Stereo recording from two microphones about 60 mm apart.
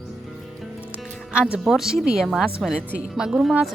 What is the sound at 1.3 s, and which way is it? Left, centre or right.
Speech, centre.